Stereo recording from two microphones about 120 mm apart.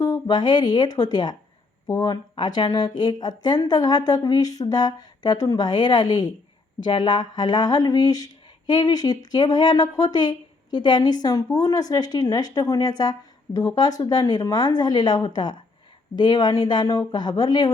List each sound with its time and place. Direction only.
0.0 s speech: 35° left (ahead or behind)